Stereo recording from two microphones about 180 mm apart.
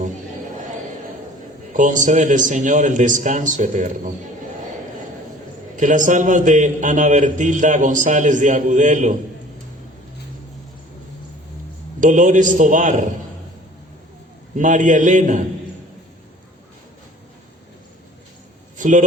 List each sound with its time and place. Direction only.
1.7 s a man's voice: 45° right (ahead or behind)
5.7 s a man's voice: 45° right (ahead or behind)
11.9 s a man's voice: 45° right (ahead or behind)
14.5 s a man's voice: 45° right (ahead or behind)
18.8 s speech: 45° right (ahead or behind)